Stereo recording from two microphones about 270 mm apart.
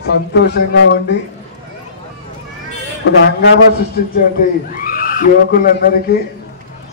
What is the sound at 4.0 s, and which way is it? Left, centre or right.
A man's voice, left.